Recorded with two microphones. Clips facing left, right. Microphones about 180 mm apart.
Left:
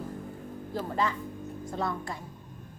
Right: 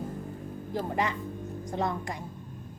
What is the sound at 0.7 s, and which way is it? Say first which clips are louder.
A woman's voice: even; 15° right (ahead or behind).